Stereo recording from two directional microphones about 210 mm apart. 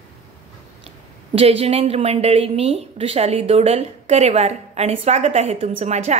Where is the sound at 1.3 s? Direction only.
25° right (ahead or behind).